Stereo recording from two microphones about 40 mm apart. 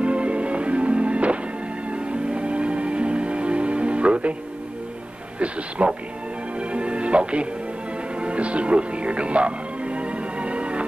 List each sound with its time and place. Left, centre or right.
0.0 s music: right
5.8 s speech: right
6.6 s music: right